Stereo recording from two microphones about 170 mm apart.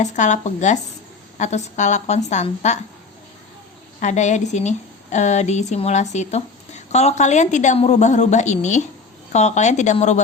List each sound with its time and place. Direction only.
0.0 s a woman's voice: 45° left (ahead or behind)
4.0 s a woman's voice: 45° left (ahead or behind)